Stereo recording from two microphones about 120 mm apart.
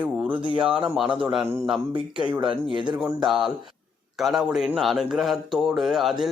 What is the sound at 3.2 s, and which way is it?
A man's voice, 5° right (ahead or behind).